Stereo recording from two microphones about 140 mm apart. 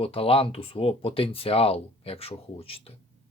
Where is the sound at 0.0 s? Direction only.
40° left (ahead or behind).